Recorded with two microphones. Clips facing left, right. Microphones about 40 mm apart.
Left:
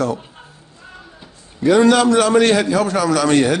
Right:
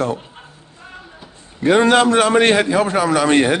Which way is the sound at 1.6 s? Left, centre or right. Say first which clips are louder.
Even; right.